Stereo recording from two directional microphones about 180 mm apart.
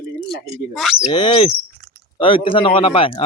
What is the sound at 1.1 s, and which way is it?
Speech, 25° left (ahead or behind).